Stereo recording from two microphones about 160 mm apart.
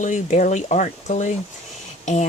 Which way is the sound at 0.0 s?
50° left (ahead or behind).